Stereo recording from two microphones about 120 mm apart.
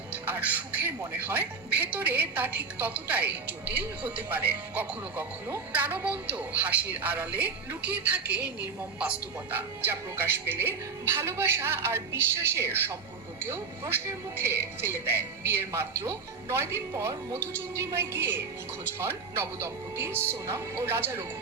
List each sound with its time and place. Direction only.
0.1 s speech: 15° right (ahead or behind)